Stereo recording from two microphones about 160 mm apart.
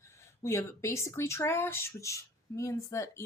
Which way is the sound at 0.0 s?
15° left (ahead or behind).